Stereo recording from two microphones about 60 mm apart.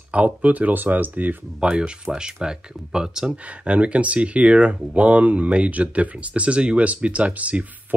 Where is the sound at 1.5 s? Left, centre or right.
Centre.